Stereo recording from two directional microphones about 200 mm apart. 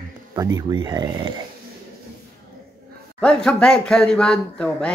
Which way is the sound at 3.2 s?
5° left (ahead or behind).